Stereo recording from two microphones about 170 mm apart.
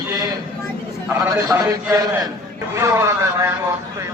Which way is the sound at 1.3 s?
15° right (ahead or behind).